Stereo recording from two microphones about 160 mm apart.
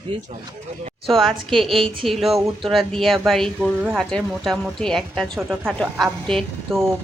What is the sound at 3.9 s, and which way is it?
Speech, 5° left (ahead or behind).